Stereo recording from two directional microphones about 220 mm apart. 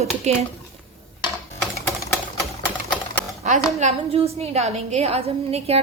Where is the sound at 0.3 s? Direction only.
30° right (ahead or behind).